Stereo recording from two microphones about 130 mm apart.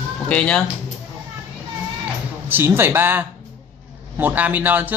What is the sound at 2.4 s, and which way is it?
Speech, 15° right (ahead or behind).